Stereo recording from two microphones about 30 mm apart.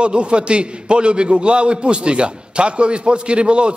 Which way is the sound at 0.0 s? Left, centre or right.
Right.